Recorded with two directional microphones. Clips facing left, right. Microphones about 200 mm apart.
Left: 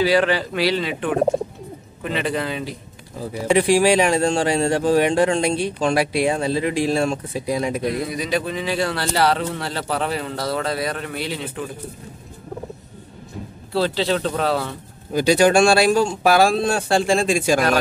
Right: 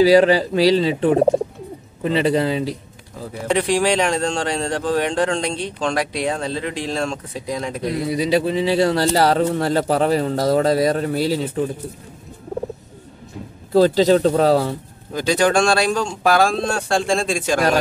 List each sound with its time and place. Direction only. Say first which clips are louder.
0.0 s a man's voice: right 6 dB; 35° right (ahead or behind)
3.3 s speech: left 2 dB; 10° left (ahead or behind)
8.1 s a man's voice: right 5 dB; 30° right (ahead or behind)
13.7 s a man's voice: right 7 dB; 45° right (ahead or behind)
15.1 s speech: left 2 dB; 10° left (ahead or behind)